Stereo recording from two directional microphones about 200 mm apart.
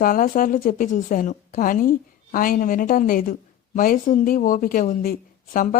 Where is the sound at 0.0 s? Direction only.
45° left (ahead or behind).